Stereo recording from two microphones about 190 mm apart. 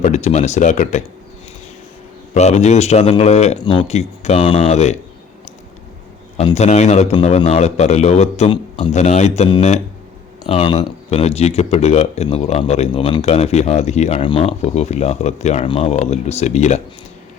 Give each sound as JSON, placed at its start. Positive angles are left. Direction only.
{"t": 0.0, "sound": "speech", "side_deg": 35}
{"t": 2.3, "sound": "speech", "side_deg": 35}
{"t": 6.3, "sound": "speech", "side_deg": 35}